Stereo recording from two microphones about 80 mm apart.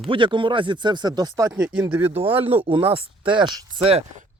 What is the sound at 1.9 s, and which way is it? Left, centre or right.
Speech, right.